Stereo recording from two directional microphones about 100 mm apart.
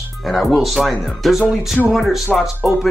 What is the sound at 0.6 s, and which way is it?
Speech, centre (ahead or behind).